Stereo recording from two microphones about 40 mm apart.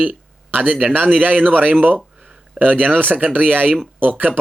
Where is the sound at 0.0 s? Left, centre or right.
Right.